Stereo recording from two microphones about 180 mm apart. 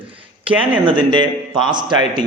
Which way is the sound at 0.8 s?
25° right (ahead or behind).